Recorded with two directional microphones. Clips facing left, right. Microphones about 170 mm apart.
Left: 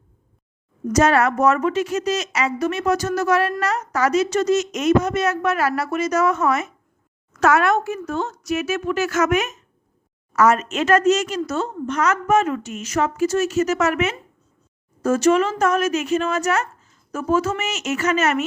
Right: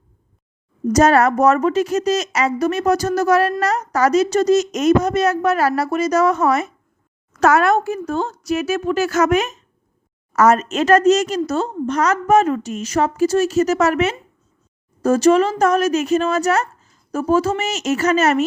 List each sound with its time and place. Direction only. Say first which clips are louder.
0.9 s a woman's voice: right 3 dB; 40° right (ahead or behind)